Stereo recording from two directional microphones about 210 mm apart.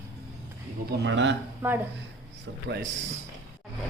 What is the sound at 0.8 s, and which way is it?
Speech, 55° right (ahead or behind).